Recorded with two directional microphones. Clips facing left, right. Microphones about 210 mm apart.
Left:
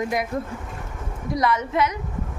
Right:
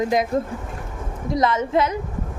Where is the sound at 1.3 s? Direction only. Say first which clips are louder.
Right 3 dB; 25° right (ahead or behind).